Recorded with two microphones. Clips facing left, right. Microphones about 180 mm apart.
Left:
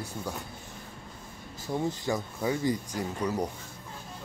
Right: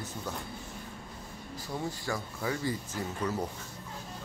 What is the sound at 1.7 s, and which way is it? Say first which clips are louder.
Speech: left 6 dB; 20° left (ahead or behind).